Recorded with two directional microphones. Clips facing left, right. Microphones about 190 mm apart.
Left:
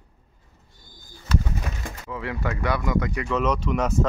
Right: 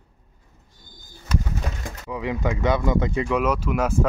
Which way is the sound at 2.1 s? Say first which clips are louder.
Right 4 dB; 15° right (ahead or behind).